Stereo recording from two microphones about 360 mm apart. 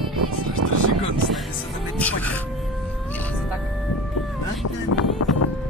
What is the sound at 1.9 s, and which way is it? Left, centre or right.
Speech, centre.